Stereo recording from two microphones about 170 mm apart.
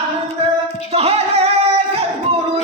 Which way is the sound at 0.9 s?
35° right (ahead or behind).